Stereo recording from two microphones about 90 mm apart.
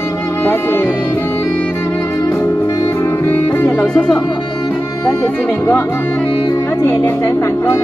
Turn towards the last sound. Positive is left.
turn(degrees=35)  # may be behind; listen again after turning